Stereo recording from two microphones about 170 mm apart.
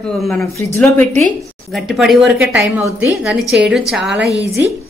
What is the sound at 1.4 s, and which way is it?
A woman's voice, centre (ahead or behind).